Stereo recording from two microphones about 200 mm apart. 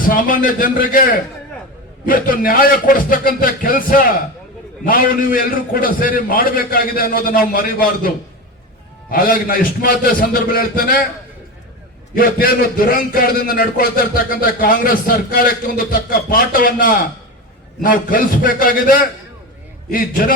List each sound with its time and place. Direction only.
0.1 s a man's voice: 45° left (ahead or behind)
12.1 s a man's voice: 45° left (ahead or behind)